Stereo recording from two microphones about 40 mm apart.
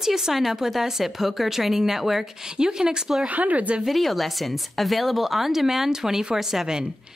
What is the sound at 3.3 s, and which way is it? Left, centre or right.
Speech, right.